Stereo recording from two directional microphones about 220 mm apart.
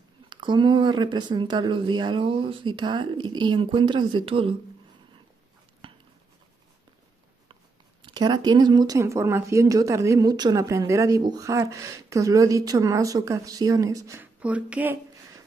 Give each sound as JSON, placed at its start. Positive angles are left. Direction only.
{"t": 0.3, "sound": "speech", "side_deg": -20}
{"t": 5.8, "sound": "a sound", "side_deg": -25}
{"t": 8.0, "sound": "speech", "side_deg": -20}